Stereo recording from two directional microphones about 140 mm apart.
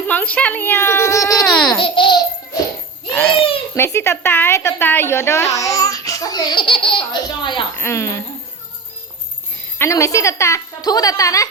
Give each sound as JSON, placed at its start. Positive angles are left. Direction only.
{"t": 0.1, "sound": "speech", "side_deg": 10}
{"t": 1.5, "sound": "speech", "side_deg": 5}
{"t": 1.8, "sound": "babbling", "side_deg": 35}
{"t": 3.8, "sound": "a sound", "side_deg": 20}
{"t": 7.8, "sound": "a sound", "side_deg": 20}
{"t": 9.7, "sound": "a woman's voice", "side_deg": 20}